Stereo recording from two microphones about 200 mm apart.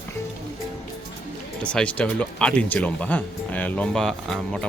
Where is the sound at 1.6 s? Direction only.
5° left (ahead or behind).